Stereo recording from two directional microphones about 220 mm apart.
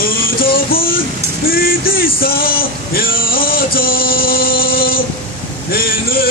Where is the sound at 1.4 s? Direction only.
40° left (ahead or behind).